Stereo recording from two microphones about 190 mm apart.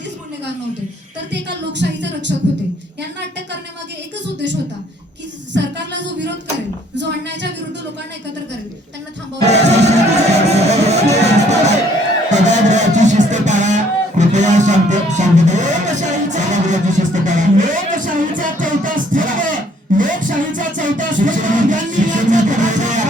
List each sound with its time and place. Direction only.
1.3 s a woman's voice: 65° right (ahead or behind)
5.5 s speech: 65° right (ahead or behind)
9.5 s music: 35° right (ahead or behind)